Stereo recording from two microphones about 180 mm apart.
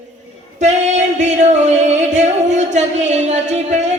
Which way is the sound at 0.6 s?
40° right (ahead or behind).